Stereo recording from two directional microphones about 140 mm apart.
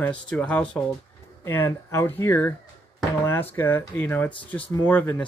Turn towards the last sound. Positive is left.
turn(degrees=10)  # may be behind; listen again after turning